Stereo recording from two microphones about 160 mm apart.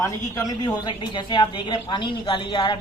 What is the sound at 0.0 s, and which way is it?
Speech, 20° left (ahead or behind).